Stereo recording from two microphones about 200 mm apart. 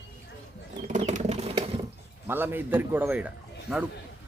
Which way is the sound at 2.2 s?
10° right (ahead or behind).